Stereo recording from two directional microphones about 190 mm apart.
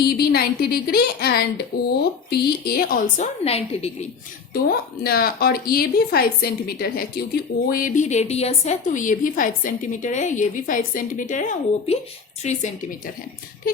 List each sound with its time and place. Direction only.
0.0 s a woman's voice: 55° left (ahead or behind)
3.4 s a woman's voice: 30° left (ahead or behind)
4.5 s a woman's voice: 55° left (ahead or behind); by 13.0 s 35° left (ahead or behind)